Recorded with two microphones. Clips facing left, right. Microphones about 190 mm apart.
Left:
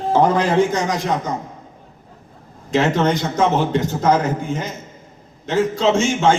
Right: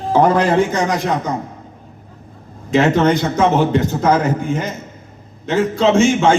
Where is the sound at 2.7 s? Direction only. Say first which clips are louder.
Right 4 dB; 60° right (ahead or behind).